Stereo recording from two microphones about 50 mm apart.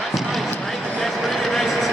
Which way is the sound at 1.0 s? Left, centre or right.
Centre.